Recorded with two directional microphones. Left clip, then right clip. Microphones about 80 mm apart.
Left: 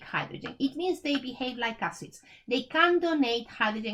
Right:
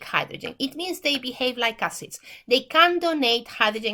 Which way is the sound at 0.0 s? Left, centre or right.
Right.